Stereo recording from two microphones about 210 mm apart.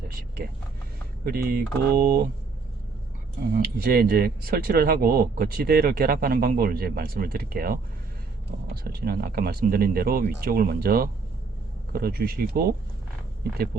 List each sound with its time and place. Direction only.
1.2 s speech: 45° right (ahead or behind)
3.6 s speech: 45° right (ahead or behind)